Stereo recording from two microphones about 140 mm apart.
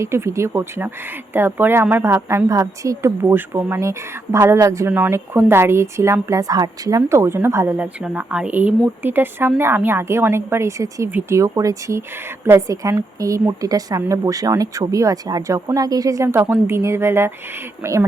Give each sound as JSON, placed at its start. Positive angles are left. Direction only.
{"t": 0.0, "sound": "a woman's voice", "side_deg": -20}